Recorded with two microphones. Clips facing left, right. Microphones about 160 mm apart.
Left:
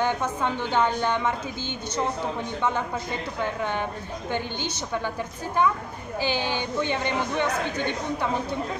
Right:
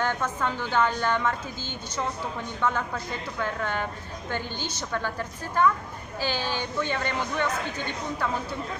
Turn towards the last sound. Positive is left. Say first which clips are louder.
# left 3 dB
turn(degrees=20)  # may be behind; listen again after turning